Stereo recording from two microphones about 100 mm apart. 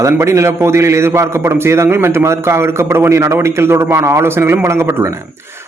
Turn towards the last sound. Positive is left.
turn(degrees=-25)  # may be behind; listen again after turning